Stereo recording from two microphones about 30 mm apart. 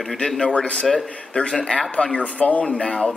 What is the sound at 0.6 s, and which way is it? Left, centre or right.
Speech, left.